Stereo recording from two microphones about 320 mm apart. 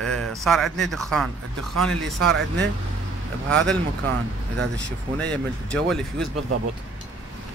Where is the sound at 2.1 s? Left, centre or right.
Right.